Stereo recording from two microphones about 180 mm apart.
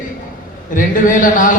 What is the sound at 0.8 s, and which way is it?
Speech, 45° left (ahead or behind).